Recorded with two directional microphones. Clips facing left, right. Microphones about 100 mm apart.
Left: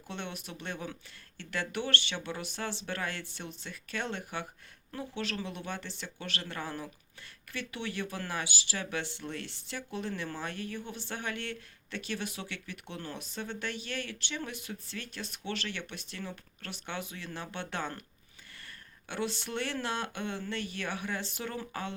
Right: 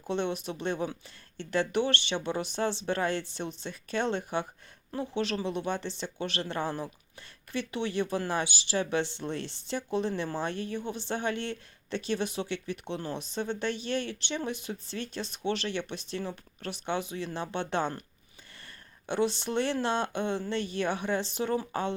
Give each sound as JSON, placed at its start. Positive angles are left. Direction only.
{"t": 0.1, "sound": "speech", "side_deg": -20}
{"t": 19.0, "sound": "speech", "side_deg": -20}